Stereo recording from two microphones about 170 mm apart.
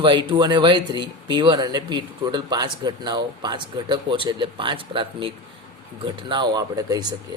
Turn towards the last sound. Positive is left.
turn(degrees=-25)  # may be behind; listen again after turning